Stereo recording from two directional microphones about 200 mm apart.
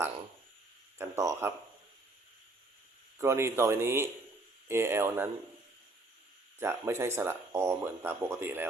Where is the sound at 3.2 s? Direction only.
15° right (ahead or behind).